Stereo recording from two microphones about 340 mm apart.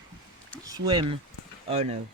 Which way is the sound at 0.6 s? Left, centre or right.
Centre.